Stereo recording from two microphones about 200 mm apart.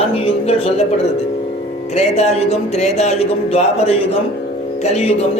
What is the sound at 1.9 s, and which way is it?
Speech, 30° left (ahead or behind).